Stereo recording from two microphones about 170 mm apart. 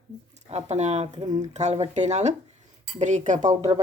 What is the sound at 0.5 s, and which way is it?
Speech, 40° right (ahead or behind).